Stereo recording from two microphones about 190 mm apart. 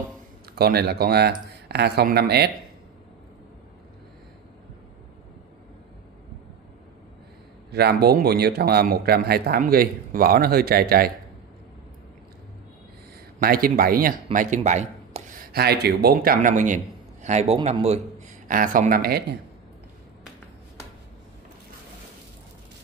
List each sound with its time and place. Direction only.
0.6 s speech: 55° right (ahead or behind)
7.7 s speech: 55° right (ahead or behind)
13.4 s a man's voice: 50° right (ahead or behind); by 18.0 s 35° right (ahead or behind)
18.5 s speech: 45° right (ahead or behind)